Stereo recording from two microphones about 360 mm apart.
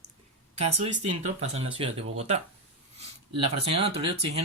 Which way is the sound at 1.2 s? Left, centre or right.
Centre.